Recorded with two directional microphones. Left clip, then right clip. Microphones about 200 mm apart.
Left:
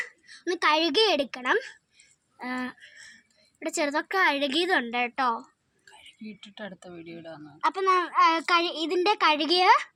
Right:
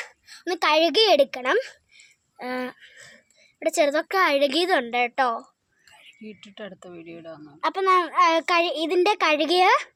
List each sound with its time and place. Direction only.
0.0 s a sound: 50° right (ahead or behind)
3.6 s a child's voice: 50° right (ahead or behind)
5.9 s speech: 5° right (ahead or behind)
7.6 s a child's voice: 50° right (ahead or behind)